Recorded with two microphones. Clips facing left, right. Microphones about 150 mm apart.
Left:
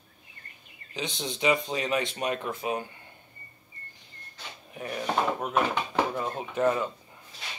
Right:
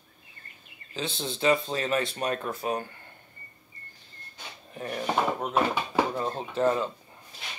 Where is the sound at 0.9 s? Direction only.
15° left (ahead or behind).